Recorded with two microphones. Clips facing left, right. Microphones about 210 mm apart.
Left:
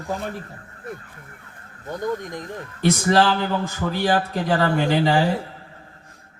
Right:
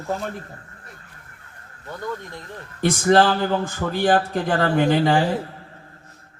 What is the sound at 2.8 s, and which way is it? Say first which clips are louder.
A man's voice: right 2 dB; 55° right (ahead or behind).